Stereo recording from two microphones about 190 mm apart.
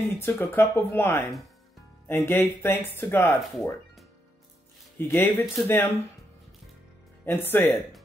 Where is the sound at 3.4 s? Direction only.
Centre (ahead or behind).